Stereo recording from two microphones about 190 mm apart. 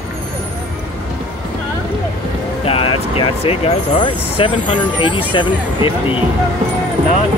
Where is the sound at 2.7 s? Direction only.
30° left (ahead or behind).